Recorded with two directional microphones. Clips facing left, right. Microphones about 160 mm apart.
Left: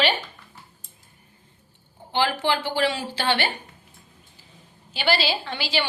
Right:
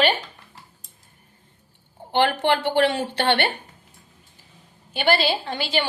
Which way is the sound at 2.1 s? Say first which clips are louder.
Right 3 dB; 60° right (ahead or behind).